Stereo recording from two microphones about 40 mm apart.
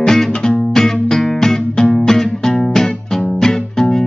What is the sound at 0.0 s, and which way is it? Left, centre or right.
Music, centre.